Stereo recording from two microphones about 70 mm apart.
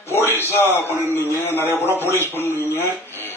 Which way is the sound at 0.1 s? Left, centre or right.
Left.